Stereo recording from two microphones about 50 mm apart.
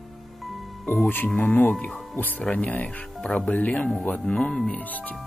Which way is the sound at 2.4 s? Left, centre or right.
Left.